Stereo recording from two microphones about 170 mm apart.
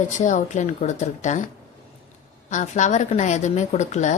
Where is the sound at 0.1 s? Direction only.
45° left (ahead or behind).